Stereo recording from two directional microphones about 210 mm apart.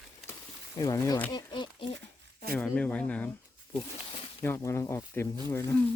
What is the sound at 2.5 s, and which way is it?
Speech, 5° left (ahead or behind).